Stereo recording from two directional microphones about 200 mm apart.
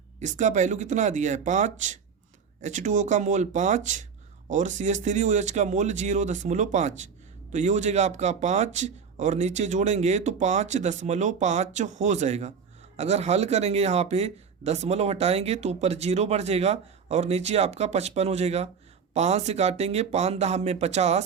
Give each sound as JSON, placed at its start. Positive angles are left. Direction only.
{"t": 0.2, "sound": "speech", "side_deg": -35}